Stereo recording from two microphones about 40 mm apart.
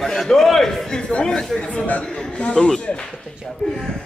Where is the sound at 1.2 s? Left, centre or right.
Centre.